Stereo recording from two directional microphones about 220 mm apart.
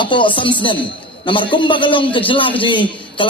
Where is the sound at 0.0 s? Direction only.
20° left (ahead or behind).